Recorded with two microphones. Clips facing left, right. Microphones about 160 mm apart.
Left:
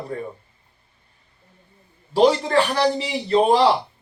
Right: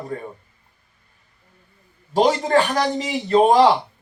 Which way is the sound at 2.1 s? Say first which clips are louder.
Even; 45° right (ahead or behind).